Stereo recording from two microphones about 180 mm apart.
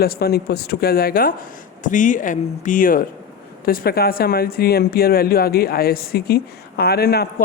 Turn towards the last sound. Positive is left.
turn(degrees=60)  # may be behind; listen again after turning